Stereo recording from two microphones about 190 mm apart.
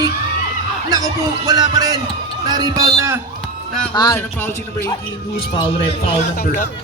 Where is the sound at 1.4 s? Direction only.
20° right (ahead or behind).